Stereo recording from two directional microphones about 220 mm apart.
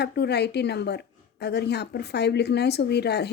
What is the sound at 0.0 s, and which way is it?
Speech, 50° left (ahead or behind).